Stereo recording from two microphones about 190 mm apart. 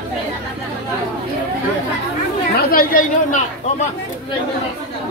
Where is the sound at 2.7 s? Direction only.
45° left (ahead or behind).